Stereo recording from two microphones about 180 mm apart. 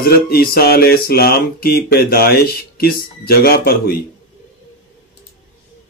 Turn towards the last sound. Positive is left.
turn(degrees=55)  # may be behind; listen again after turning